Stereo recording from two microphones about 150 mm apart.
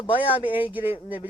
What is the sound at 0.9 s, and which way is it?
Speech, 35° left (ahead or behind).